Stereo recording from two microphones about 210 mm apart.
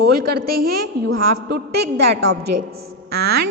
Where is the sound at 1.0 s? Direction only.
55° right (ahead or behind).